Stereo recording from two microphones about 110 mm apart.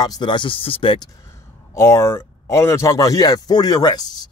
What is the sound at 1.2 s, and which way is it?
Speech, 25° left (ahead or behind).